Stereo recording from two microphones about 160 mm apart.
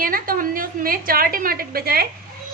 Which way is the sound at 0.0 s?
60° right (ahead or behind).